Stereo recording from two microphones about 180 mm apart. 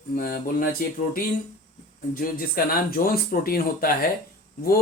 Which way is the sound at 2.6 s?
55° left (ahead or behind).